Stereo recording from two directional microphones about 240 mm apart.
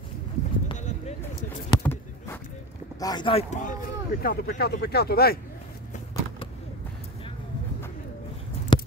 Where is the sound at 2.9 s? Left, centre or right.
Centre; by 5.4 s left.